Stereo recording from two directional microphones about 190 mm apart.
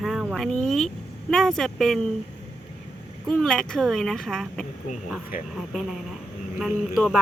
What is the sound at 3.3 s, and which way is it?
Speech, 5° left (ahead or behind).